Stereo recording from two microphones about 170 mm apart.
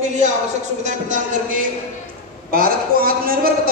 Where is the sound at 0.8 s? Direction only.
45° right (ahead or behind).